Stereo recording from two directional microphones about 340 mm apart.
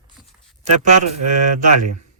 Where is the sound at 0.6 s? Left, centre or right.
Right.